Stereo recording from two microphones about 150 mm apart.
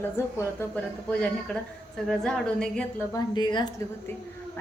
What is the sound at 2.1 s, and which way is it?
Speech, 5° left (ahead or behind).